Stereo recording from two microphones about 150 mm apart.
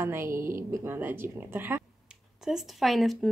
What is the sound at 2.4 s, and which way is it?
Speech, centre (ahead or behind).